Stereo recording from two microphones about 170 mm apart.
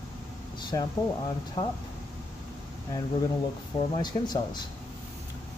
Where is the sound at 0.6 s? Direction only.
25° left (ahead or behind).